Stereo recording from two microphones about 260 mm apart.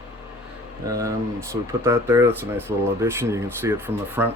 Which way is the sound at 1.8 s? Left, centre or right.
Centre.